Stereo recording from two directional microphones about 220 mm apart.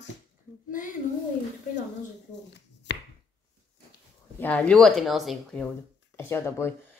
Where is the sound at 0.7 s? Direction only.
35° left (ahead or behind).